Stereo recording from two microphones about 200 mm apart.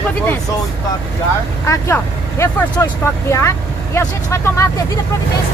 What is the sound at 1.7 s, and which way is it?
Speech, 15° left (ahead or behind).